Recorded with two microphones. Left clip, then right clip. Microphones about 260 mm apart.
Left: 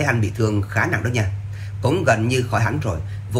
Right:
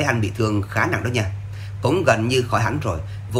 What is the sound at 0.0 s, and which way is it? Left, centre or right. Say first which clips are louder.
Speech: even; centre.